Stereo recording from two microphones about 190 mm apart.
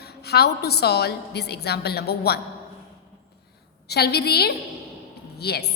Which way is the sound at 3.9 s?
60° left (ahead or behind).